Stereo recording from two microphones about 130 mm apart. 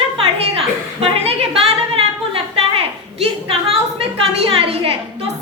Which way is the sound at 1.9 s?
50° right (ahead or behind).